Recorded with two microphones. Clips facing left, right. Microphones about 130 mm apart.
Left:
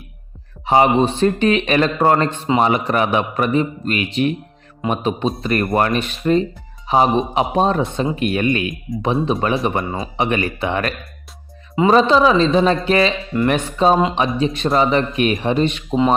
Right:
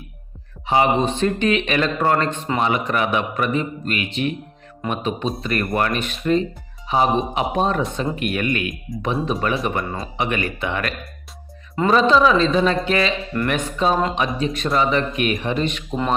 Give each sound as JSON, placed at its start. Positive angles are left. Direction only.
{"t": 0.6, "sound": "a man's voice", "side_deg": 40}